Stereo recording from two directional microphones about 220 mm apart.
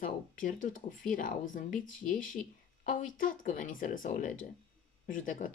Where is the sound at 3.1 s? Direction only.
40° left (ahead or behind).